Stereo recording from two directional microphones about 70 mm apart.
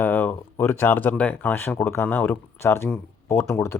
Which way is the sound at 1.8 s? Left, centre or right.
Left.